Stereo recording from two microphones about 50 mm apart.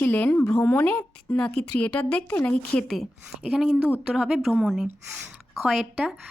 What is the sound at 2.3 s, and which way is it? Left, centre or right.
Speech, left.